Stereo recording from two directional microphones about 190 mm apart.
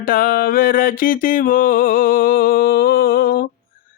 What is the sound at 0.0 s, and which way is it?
Mantra, 50° left (ahead or behind).